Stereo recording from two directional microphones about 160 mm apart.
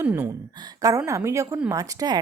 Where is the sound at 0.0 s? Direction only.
15° right (ahead or behind).